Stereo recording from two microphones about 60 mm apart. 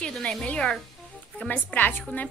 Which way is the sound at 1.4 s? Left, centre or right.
Left.